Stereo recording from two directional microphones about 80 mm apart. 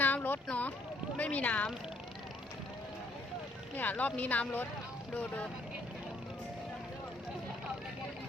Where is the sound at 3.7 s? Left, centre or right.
Left.